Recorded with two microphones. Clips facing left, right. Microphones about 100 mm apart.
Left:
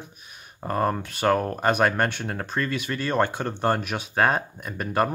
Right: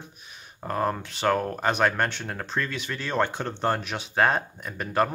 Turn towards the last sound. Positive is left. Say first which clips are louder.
# left 1 dB
turn(degrees=5)  # may be behind; listen again after turning